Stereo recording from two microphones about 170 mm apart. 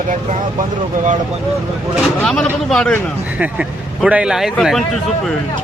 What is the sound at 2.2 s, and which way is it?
Speech, 5° left (ahead or behind).